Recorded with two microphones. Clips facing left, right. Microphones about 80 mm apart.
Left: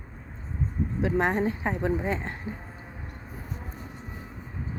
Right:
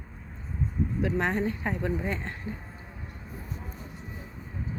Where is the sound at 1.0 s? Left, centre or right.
Left.